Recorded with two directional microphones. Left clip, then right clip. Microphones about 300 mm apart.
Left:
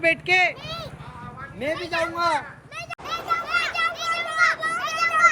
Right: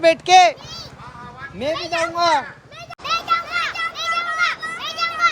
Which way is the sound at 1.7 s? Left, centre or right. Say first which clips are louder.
Right 5 dB; right.